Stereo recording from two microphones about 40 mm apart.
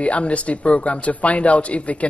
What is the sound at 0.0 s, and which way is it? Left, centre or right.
Speech, left.